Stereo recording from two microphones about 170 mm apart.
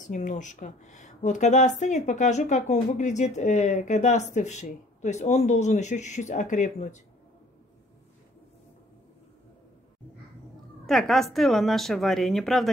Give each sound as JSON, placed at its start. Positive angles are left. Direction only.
{"t": 0.0, "sound": "speech", "side_deg": 45}
{"t": 10.9, "sound": "a woman's voice", "side_deg": 0}